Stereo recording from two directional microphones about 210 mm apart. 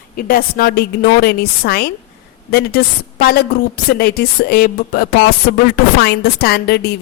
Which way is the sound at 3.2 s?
45° left (ahead or behind).